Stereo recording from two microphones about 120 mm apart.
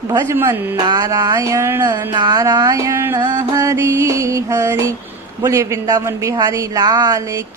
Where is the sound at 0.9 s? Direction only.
30° right (ahead or behind).